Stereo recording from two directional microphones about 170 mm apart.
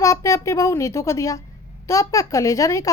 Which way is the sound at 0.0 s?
20° left (ahead or behind).